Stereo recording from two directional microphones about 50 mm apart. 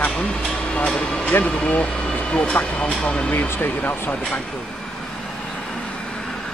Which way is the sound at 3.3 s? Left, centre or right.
Left.